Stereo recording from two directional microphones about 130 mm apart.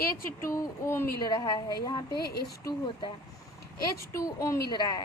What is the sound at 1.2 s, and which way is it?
A woman's voice, 30° left (ahead or behind).